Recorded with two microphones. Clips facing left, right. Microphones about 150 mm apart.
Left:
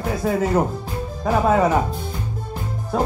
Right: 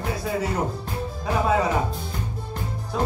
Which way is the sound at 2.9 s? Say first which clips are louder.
Left 4 dB; 50° left (ahead or behind).